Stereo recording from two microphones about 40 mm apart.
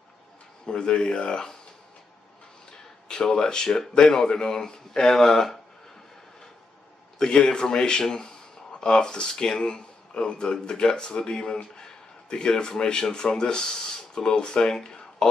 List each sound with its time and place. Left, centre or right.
0.7 s speech: left
3.1 s speech: centre
7.2 s a man's voice: centre